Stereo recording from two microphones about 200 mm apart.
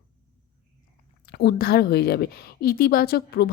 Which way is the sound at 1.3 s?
55° left (ahead or behind).